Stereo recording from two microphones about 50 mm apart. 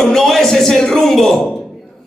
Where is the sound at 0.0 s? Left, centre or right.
Centre.